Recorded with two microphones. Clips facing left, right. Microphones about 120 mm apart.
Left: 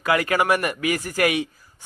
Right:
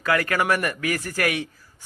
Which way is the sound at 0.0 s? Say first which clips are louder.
Left 2 dB; 15° left (ahead or behind).